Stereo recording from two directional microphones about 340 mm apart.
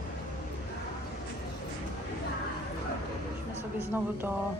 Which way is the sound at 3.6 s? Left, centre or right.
Centre.